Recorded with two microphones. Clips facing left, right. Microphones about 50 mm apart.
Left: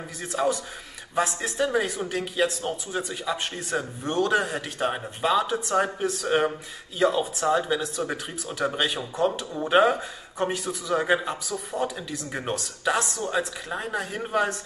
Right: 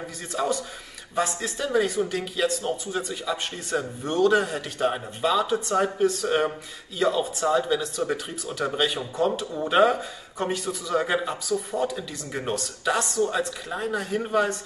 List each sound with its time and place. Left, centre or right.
0.3 s speech: centre